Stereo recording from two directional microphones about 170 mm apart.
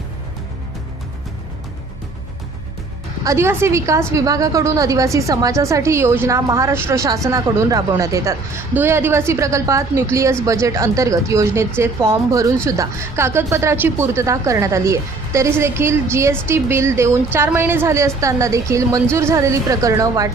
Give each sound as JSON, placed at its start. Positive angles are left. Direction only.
{"t": 3.2, "sound": "a woman's voice", "side_deg": -15}